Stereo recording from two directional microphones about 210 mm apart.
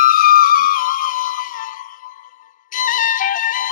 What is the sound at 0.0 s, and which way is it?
Music, 45° left (ahead or behind).